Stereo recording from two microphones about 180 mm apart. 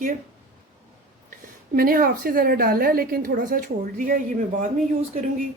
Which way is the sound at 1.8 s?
55° right (ahead or behind).